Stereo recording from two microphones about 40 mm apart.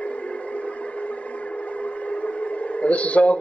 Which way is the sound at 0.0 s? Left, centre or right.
Left.